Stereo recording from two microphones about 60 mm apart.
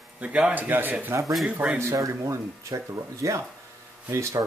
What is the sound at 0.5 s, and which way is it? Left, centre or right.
Speech, right.